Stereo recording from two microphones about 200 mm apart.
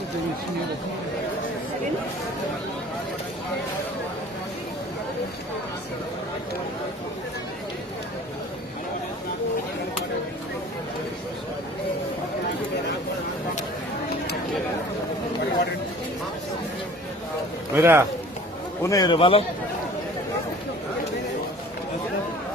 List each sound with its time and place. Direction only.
17.7 s speech: 10° right (ahead or behind)
18.8 s a man's voice: 15° left (ahead or behind)